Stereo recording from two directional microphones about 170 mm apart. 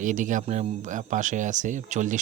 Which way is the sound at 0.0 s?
50° right (ahead or behind).